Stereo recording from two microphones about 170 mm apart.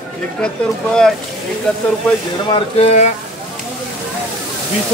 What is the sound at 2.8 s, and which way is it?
Speech, 40° left (ahead or behind).